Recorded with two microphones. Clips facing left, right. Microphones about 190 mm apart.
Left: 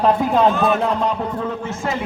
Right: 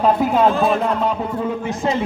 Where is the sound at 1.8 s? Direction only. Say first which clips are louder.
Right 4 dB; 20° right (ahead or behind).